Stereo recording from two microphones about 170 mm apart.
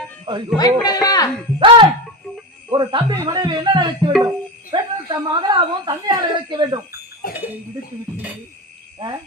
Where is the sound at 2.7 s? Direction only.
30° right (ahead or behind).